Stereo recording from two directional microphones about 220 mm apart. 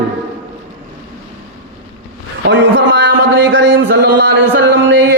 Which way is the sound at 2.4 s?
55° right (ahead or behind).